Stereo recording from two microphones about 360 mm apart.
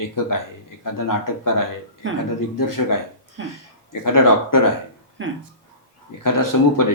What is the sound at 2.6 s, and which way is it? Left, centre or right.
Speech, left.